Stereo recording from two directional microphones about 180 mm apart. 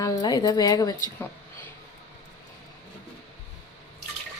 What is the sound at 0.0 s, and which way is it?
Speech, 20° left (ahead or behind).